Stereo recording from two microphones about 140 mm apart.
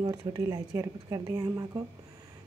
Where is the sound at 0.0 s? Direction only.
30° right (ahead or behind).